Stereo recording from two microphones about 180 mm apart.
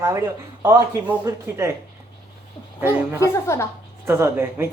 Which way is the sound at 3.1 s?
15° left (ahead or behind).